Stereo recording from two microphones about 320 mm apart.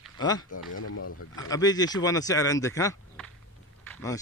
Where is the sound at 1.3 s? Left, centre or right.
Centre.